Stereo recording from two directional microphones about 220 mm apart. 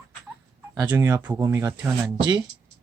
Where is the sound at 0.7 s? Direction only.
15° right (ahead or behind).